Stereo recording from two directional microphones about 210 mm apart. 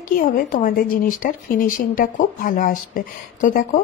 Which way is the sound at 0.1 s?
40° left (ahead or behind).